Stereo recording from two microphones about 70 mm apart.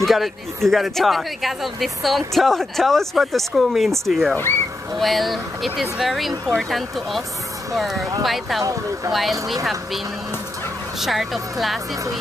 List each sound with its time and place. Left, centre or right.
0.0 s speech: centre
11.0 s speech: centre